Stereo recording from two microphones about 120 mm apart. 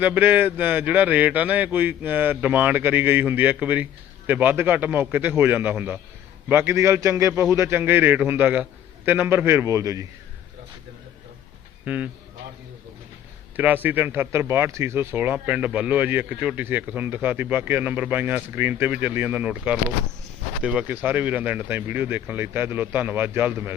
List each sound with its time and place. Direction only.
0.0 s a man's voice: 15° right (ahead or behind)
11.9 s speech: 15° right (ahead or behind)
13.6 s speech: 15° right (ahead or behind)